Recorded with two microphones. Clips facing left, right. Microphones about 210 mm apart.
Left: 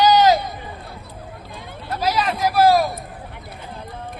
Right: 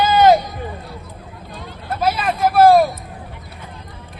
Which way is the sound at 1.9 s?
55° right (ahead or behind).